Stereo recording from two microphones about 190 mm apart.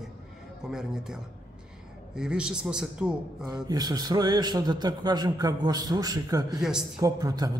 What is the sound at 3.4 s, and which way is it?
A man's voice, 20° right (ahead or behind).